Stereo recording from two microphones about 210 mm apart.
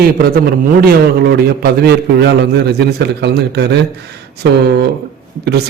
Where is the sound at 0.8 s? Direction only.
50° right (ahead or behind).